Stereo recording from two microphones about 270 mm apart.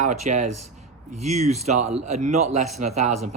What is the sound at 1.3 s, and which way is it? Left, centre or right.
A man's voice, right.